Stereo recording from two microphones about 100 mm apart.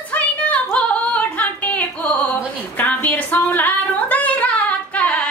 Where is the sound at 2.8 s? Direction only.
15° left (ahead or behind).